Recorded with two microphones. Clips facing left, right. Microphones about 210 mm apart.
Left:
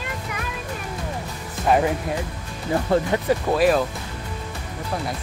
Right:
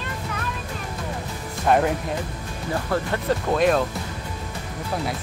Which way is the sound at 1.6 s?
Centre (ahead or behind).